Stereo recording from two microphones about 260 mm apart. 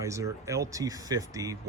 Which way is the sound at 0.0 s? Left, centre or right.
Centre.